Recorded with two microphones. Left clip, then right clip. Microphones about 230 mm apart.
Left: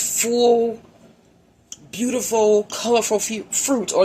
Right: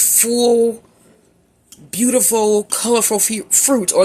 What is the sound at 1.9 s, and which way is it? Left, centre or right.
Speech, right.